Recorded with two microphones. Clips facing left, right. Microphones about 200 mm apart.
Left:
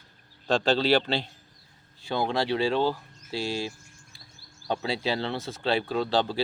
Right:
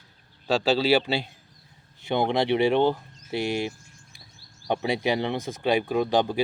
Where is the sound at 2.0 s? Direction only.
20° right (ahead or behind).